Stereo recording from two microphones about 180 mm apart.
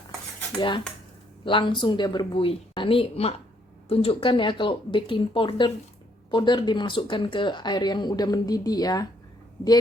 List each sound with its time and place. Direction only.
1.5 s speech: 30° left (ahead or behind)